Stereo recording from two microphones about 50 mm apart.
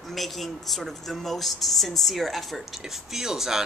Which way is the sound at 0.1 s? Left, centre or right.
Centre.